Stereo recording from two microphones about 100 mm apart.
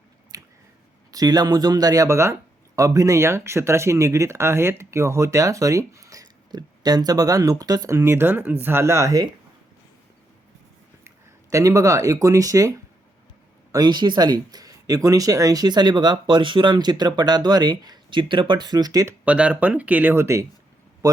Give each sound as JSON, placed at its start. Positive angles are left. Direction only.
{"t": 0.3, "sound": "a sound", "side_deg": -35}
{"t": 1.1, "sound": "speech", "side_deg": -40}
{"t": 11.5, "sound": "speech", "side_deg": -35}
{"t": 13.7, "sound": "speech", "side_deg": -45}
{"t": 19.2, "sound": "speech", "side_deg": -15}